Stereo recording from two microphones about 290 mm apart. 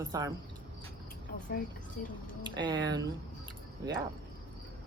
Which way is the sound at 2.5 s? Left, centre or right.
Centre.